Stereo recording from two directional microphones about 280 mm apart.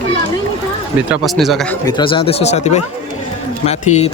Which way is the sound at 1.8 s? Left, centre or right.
Centre.